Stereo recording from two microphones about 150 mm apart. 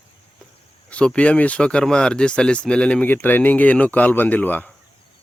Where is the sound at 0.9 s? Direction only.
5° left (ahead or behind).